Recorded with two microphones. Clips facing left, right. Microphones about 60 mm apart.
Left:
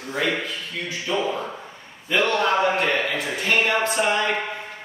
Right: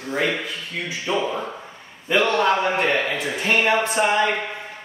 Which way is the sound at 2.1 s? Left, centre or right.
Centre.